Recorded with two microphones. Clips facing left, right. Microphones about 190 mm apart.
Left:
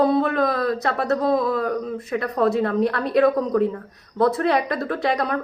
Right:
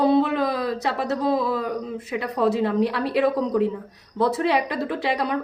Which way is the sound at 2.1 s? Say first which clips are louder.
Left 2 dB; 15° right (ahead or behind).